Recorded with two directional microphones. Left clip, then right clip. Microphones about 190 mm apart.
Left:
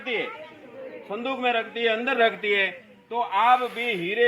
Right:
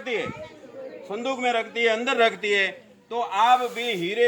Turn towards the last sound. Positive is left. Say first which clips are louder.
# even
turn(degrees=-10)  # may be behind; listen again after turning